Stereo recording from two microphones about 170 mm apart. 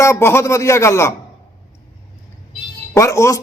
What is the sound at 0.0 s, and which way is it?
Speech, 15° left (ahead or behind).